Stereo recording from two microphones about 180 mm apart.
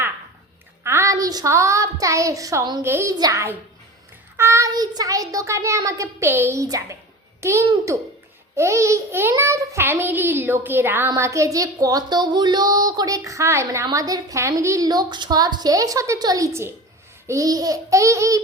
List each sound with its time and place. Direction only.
0.9 s a child's voice: 15° right (ahead or behind)